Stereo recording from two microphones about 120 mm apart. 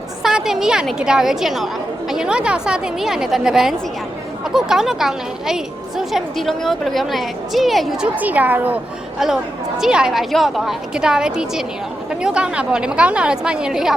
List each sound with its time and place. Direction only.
0.2 s a woman's voice: 5° right (ahead or behind)
8.1 s a woman's voice: 15° right (ahead or behind)